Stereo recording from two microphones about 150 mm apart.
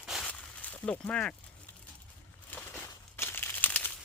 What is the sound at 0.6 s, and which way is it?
Speech, 10° left (ahead or behind).